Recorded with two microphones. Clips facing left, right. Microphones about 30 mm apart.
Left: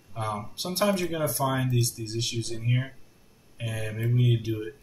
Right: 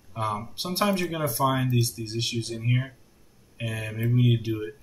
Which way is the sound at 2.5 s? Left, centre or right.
Centre.